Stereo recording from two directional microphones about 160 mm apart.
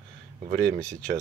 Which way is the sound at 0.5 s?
65° right (ahead or behind).